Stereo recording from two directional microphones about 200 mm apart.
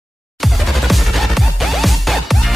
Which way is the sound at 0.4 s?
Centre (ahead or behind).